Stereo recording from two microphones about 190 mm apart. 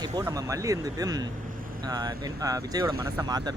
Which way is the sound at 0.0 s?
15° right (ahead or behind).